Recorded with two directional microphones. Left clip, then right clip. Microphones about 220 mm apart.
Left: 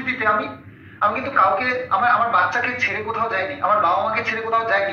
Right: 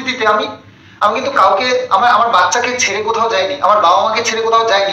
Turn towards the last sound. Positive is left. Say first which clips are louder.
# right 8 dB
turn(degrees=-60)  # may be behind; listen again after turning